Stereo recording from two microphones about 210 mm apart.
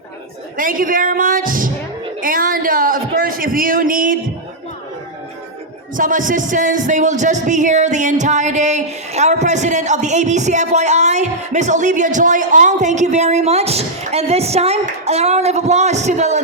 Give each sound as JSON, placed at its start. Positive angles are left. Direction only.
{"t": 0.5, "sound": "speech", "side_deg": -40}
{"t": 6.0, "sound": "speech", "side_deg": -40}